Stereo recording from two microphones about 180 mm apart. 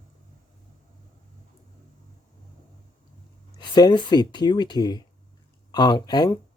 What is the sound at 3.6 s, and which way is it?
Speech, 25° left (ahead or behind).